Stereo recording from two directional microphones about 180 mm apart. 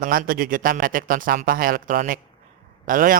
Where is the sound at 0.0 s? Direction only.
50° right (ahead or behind).